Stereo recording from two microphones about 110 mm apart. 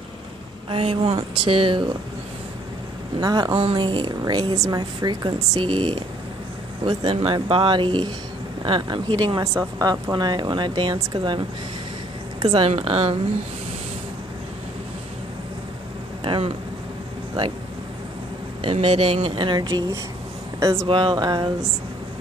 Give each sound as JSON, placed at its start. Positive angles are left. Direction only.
{"t": 0.7, "sound": "speech", "side_deg": -55}
{"t": 3.2, "sound": "speech", "side_deg": -35}
{"t": 3.5, "sound": "speech", "side_deg": -50}
{"t": 9.4, "sound": "speech", "side_deg": -30}
{"t": 12.6, "sound": "speech", "side_deg": -65}
{"t": 16.3, "sound": "speech", "side_deg": -55}
{"t": 18.6, "sound": "speech", "side_deg": -55}
{"t": 20.8, "sound": "speech", "side_deg": -50}